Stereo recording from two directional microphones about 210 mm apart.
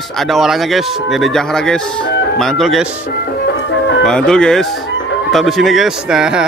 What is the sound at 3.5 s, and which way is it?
Music, 60° left (ahead or behind).